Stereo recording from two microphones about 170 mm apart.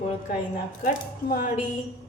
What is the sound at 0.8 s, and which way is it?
Speech, 60° left (ahead or behind).